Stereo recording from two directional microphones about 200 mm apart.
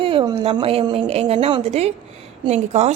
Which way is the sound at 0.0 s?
25° right (ahead or behind).